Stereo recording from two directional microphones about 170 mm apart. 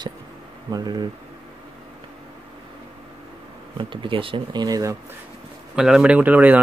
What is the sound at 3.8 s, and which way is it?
Speech, 30° right (ahead or behind).